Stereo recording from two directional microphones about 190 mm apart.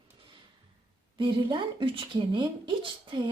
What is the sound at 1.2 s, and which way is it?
A woman's voice, 25° right (ahead or behind).